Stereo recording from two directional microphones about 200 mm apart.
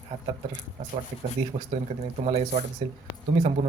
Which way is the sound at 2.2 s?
35° right (ahead or behind).